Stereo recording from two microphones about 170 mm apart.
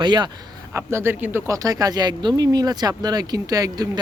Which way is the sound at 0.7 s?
15° right (ahead or behind).